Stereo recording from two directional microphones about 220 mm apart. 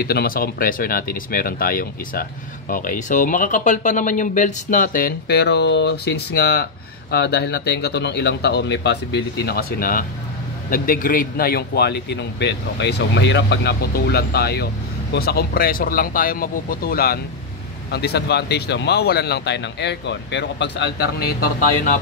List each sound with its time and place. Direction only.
0.0 s speech: 45° left (ahead or behind)